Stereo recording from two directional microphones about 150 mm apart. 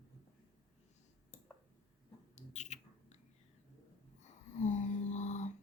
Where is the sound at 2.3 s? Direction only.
50° left (ahead or behind).